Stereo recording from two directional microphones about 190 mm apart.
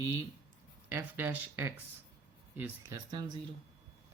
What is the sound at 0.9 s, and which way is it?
Speech, 15° right (ahead or behind).